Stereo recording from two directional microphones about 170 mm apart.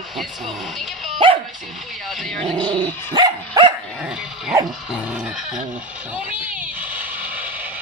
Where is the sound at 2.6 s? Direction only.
30° right (ahead or behind).